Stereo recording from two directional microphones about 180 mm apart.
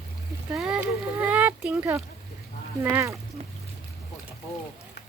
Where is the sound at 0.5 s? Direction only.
5° right (ahead or behind).